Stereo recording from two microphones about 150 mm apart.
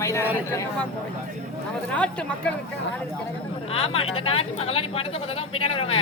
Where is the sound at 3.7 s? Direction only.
40° left (ahead or behind).